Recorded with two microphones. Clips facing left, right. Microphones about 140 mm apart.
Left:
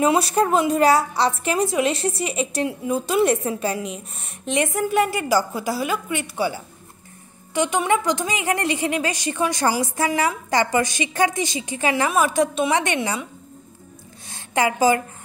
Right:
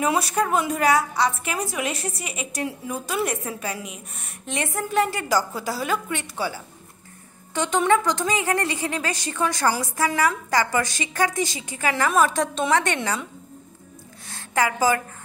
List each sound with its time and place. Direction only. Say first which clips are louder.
0.0 s a woman's voice: left 4 dB; 30° left (ahead or behind)
12.1 s a woman's voice: left 1 dB; 10° left (ahead or behind)
14.2 s a sound: left 2 dB; 20° left (ahead or behind)